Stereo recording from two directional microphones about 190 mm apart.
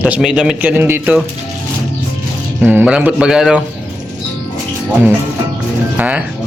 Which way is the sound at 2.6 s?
5° right (ahead or behind).